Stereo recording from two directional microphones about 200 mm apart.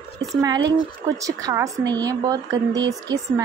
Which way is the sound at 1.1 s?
15° right (ahead or behind).